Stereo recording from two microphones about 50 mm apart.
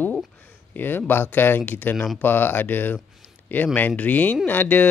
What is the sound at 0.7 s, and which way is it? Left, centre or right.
Speech, left.